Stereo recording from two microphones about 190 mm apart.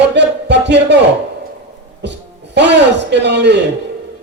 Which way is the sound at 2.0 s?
65° right (ahead or behind).